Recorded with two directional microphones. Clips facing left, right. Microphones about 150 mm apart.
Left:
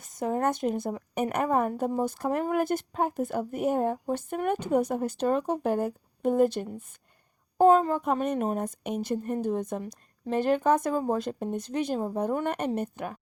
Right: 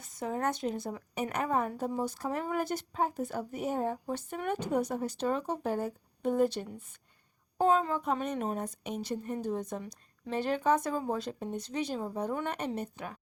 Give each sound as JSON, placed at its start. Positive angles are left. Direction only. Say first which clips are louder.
{"t": 0.0, "sound": "a woman's voice", "louder": "left 5 dB", "side_deg": 45}